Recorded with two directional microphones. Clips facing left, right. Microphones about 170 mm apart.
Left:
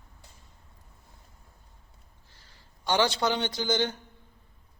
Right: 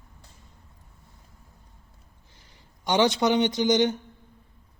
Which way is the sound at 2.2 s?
20° right (ahead or behind).